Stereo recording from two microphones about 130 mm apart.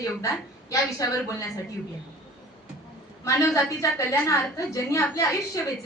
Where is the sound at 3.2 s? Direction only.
25° left (ahead or behind).